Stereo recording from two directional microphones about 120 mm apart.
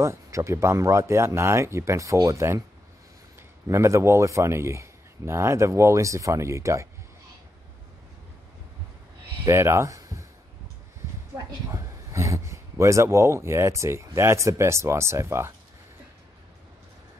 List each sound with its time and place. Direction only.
0.0 s speech: 25° right (ahead or behind)
3.6 s speech: 25° right (ahead or behind)
9.5 s speech: 25° right (ahead or behind)
11.7 s speech: 25° right (ahead or behind)